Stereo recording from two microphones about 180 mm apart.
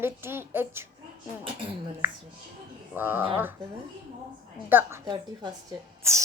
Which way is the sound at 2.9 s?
10° right (ahead or behind).